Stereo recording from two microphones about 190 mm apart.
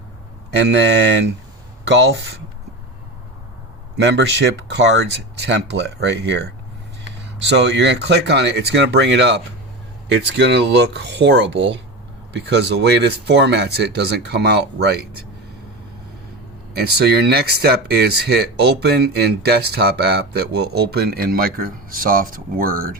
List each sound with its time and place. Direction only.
0.7 s speech: 65° right (ahead or behind)
3.9 s speech: 65° right (ahead or behind)
16.7 s speech: 60° right (ahead or behind)